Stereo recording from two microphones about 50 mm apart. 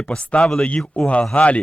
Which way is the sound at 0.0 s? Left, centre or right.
Left.